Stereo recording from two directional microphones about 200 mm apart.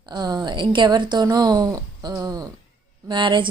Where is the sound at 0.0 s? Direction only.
20° right (ahead or behind).